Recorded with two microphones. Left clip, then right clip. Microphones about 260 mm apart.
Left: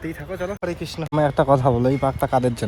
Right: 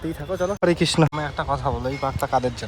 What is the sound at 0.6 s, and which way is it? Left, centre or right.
Speech, right.